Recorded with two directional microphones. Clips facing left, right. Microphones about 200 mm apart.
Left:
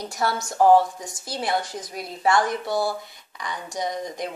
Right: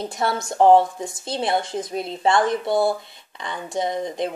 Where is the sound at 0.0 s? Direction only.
25° right (ahead or behind).